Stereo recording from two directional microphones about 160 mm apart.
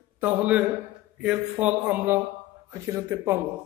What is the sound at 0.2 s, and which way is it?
A man's voice, 10° right (ahead or behind).